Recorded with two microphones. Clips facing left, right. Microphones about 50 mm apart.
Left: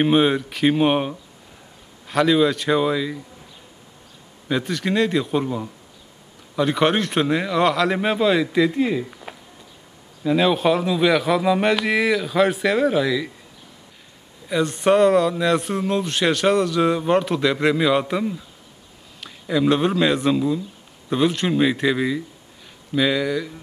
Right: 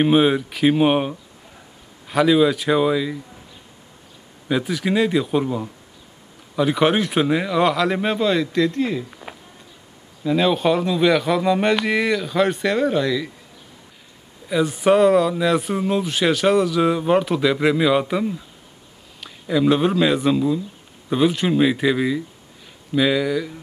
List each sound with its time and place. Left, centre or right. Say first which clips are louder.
0.0 s speech: right 1 dB; centre
4.5 s speech: right 1 dB; centre
10.2 s speech: even; centre
14.5 s speech: right 1 dB; centre